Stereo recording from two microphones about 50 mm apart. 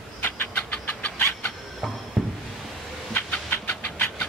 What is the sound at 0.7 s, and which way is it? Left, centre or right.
Cat, left.